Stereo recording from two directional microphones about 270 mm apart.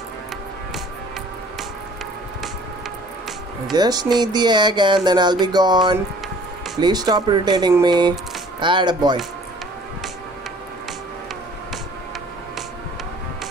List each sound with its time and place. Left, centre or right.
3.7 s speech: centre